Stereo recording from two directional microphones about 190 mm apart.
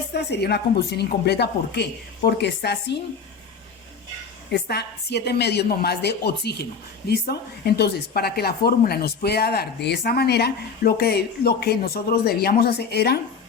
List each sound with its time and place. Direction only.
0.1 s speech: 60° left (ahead or behind)
4.5 s speech: 60° left (ahead or behind)